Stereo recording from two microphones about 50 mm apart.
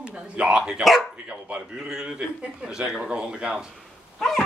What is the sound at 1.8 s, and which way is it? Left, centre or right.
Speech, centre.